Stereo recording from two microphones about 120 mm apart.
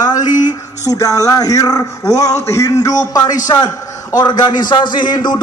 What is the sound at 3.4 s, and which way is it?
A man's voice, 30° left (ahead or behind).